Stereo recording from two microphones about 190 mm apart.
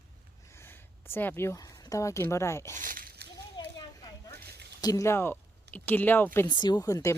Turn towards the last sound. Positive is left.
turn(degrees=15)  # may be behind; listen again after turning